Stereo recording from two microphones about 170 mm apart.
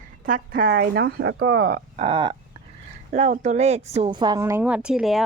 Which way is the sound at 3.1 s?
45° right (ahead or behind).